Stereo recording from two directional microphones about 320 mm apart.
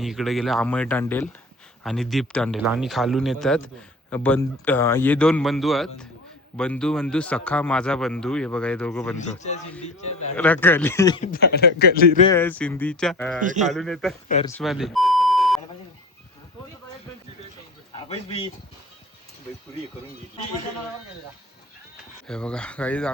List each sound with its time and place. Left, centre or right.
0.0 s speech: centre
9.4 s a man's voice: left
10.3 s speech: centre
11.3 s a man's voice: left
12.3 s speech: centre
13.4 s a man's voice: right
13.7 s speech: centre
14.4 s beep: centre
22.3 s speech: centre